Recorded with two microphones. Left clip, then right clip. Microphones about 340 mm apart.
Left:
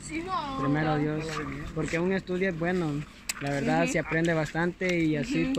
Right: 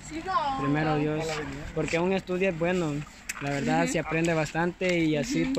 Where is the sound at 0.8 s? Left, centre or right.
Centre.